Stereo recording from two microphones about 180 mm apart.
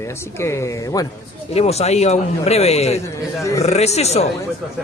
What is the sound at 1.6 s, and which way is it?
Speech, 35° left (ahead or behind).